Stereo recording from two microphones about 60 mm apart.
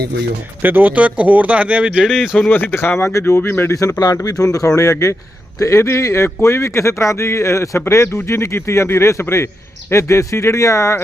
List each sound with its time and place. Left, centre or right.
0.6 s speech: right
2.0 s speech: centre
2.5 s speech: left
3.0 s speech: left
3.7 s speech: left